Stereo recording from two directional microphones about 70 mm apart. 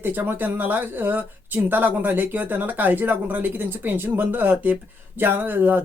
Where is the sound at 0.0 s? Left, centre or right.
Right.